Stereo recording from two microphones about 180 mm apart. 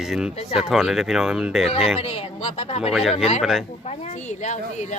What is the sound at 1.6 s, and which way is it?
Speech, 35° left (ahead or behind).